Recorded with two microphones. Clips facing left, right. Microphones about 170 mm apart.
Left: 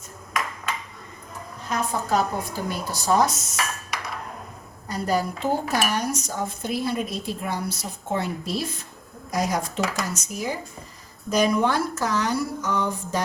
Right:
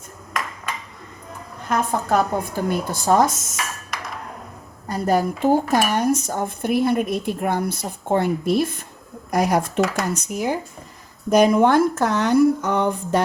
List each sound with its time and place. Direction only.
1.6 s speech: 55° right (ahead or behind)
4.9 s speech: 50° right (ahead or behind)